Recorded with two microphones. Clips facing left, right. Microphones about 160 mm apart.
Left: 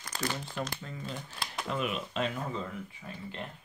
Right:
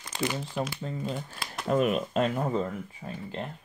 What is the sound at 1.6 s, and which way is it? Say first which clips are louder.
Speech: right 9 dB; 45° right (ahead or behind).